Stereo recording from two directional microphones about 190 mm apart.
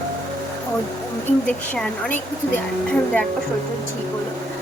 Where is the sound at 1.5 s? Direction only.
5° left (ahead or behind).